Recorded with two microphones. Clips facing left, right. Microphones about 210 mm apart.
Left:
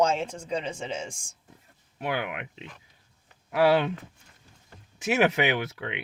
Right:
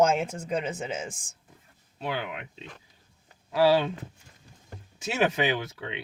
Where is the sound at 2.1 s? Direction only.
20° left (ahead or behind).